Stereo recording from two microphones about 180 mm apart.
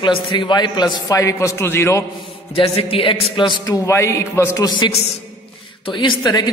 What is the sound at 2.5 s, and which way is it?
Speech, 35° left (ahead or behind).